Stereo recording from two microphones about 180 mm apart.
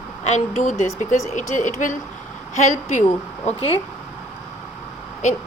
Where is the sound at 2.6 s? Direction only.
40° left (ahead or behind).